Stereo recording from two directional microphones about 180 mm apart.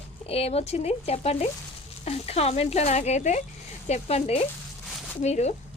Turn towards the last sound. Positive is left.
turn(degrees=40)  # may be behind; listen again after turning